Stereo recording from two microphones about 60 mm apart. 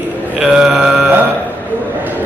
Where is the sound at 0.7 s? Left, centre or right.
Centre.